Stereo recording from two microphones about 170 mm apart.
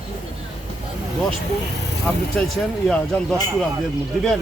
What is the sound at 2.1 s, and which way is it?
A man's voice, 5° left (ahead or behind).